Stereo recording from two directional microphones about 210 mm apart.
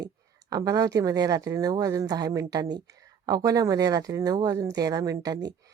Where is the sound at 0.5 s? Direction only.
15° right (ahead or behind).